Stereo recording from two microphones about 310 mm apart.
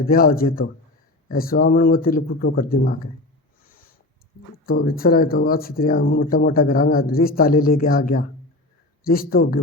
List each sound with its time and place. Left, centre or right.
0.1 s speech: left
3.6 s owl: left
4.6 s speech: left